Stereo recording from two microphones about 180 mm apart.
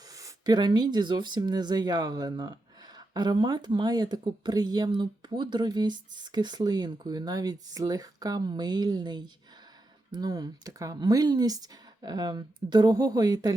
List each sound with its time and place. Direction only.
0.2 s speech: 20° right (ahead or behind)